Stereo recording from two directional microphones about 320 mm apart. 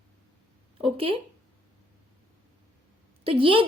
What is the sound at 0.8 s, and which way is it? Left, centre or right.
Speech, centre.